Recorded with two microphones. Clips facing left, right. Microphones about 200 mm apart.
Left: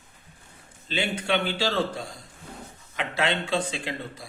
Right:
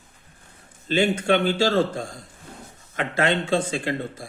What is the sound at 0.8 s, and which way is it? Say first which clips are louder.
Speech: right 7 dB; 45° right (ahead or behind).